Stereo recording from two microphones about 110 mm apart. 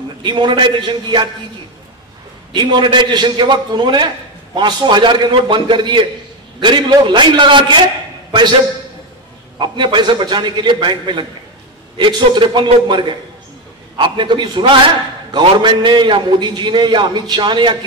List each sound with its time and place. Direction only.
0.2 s a man's voice: 45° right (ahead or behind)
2.5 s a man's voice: 45° right (ahead or behind)
9.6 s a man's voice: 45° right (ahead or behind)